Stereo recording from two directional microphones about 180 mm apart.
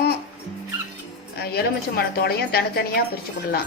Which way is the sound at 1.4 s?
60° left (ahead or behind).